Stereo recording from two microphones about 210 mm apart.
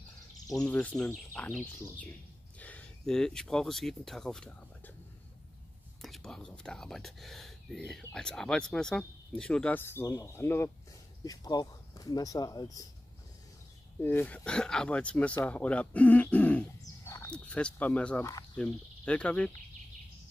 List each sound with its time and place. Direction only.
0.5 s speech: 10° left (ahead or behind)
6.0 s speech: centre (ahead or behind); by 12.8 s 15° left (ahead or behind)
14.0 s speech: 10° left (ahead or behind)